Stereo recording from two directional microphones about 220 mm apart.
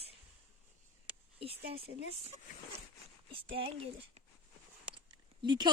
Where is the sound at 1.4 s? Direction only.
25° right (ahead or behind).